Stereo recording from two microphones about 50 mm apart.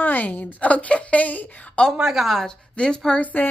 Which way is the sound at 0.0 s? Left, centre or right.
Left.